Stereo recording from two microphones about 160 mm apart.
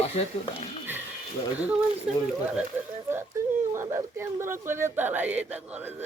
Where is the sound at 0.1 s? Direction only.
40° left (ahead or behind).